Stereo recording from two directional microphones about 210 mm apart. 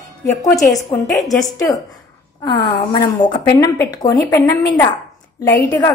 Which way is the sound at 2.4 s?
20° left (ahead or behind).